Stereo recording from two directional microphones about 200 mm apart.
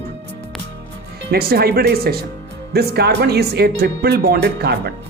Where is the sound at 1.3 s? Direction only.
50° right (ahead or behind).